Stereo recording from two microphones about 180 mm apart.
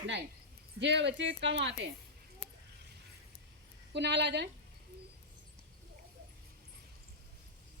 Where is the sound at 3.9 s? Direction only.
75° right (ahead or behind).